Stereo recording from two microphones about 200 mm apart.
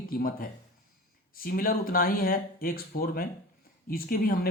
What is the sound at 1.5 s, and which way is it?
Speech, 45° left (ahead or behind).